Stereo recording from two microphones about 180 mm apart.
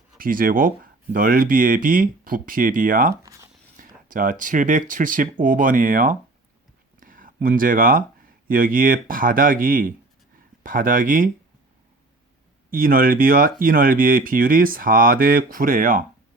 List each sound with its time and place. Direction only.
0.2 s speech: 50° right (ahead or behind)
3.2 s a sound: 15° right (ahead or behind)
3.8 s speech: 50° right (ahead or behind)
7.0 s a sound: 50° right (ahead or behind)
8.4 s speech: 50° right (ahead or behind)
12.7 s speech: 50° right (ahead or behind)